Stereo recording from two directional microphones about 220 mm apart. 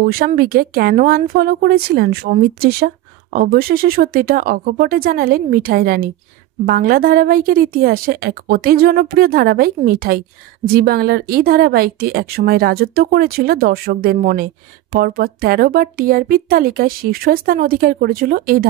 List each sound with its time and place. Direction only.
0.0 s speech: 40° right (ahead or behind)